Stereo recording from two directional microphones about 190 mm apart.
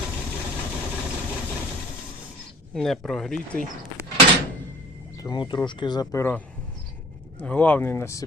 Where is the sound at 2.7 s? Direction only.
5° left (ahead or behind).